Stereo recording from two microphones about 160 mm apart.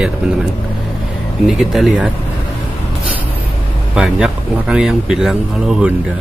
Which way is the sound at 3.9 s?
5° right (ahead or behind).